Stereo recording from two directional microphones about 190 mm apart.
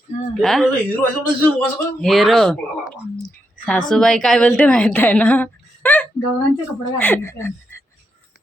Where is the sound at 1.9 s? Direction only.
Centre (ahead or behind).